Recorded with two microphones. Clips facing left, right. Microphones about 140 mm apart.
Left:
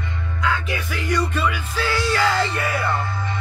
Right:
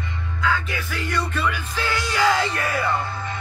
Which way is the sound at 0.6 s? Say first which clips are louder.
Left 3 dB; 10° left (ahead or behind).